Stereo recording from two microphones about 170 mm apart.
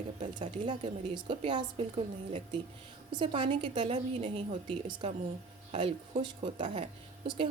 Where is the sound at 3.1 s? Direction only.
30° right (ahead or behind).